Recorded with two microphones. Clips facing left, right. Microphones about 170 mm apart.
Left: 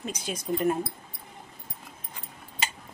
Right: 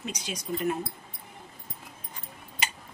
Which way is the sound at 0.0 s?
50° left (ahead or behind).